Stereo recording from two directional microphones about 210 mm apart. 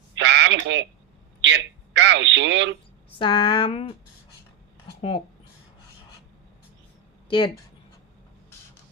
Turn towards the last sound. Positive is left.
turn(degrees=20)  # may be behind; listen again after turning